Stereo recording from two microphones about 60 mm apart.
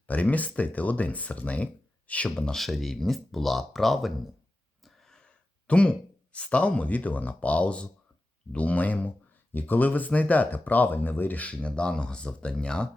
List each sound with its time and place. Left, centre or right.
0.1 s speech: left
2.6 s speech: centre